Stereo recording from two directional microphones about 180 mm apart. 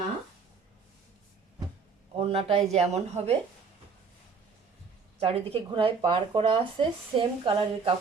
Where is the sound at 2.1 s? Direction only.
30° right (ahead or behind).